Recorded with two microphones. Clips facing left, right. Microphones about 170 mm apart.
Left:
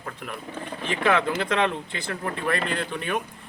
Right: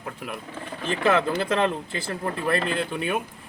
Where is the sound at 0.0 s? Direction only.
5° right (ahead or behind).